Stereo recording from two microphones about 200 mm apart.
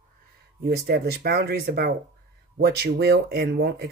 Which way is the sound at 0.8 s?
50° right (ahead or behind).